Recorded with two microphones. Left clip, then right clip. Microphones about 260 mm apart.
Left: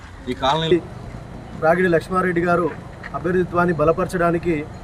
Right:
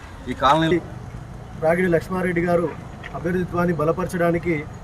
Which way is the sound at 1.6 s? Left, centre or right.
Centre.